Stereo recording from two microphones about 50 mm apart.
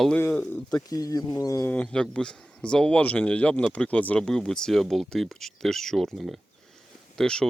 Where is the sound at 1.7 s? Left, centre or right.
Left.